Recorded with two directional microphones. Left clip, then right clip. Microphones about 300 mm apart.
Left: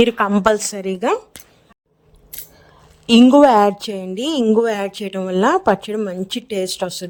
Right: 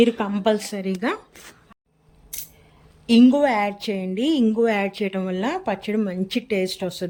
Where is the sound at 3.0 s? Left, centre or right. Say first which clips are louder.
Left 7 dB; left.